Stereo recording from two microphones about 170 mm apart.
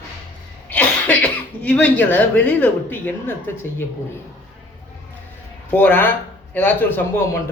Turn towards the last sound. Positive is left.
turn(degrees=10)  # may be behind; listen again after turning